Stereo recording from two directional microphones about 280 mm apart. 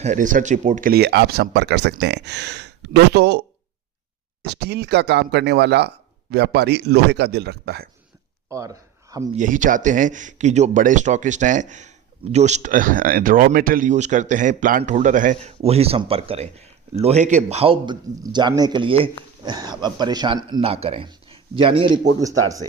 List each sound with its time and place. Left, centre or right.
0.0 s speech: right
4.4 s speech: right
8.4 s a sound: centre
9.3 s speech: right; by 22.6 s centre